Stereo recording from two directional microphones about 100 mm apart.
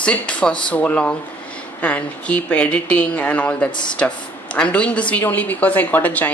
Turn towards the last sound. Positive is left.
turn(degrees=15)  # may be behind; listen again after turning